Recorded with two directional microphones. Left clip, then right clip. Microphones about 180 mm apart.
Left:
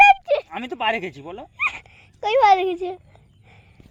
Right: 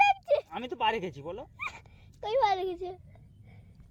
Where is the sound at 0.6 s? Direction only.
35° left (ahead or behind).